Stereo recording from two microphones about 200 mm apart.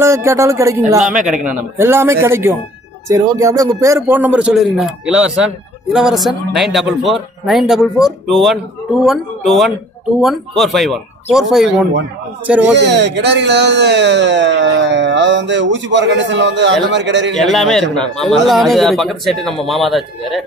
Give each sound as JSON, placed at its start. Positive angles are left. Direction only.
{"t": 0.0, "sound": "speech", "side_deg": -15}
{"t": 1.2, "sound": "speech", "side_deg": 0}
{"t": 12.7, "sound": "speech", "side_deg": -60}
{"t": 17.4, "sound": "speech", "side_deg": 0}